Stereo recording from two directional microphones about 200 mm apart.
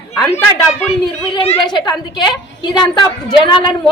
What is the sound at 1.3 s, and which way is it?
Speech, 25° left (ahead or behind).